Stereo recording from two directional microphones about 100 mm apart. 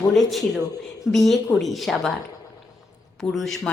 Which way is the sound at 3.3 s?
Centre (ahead or behind).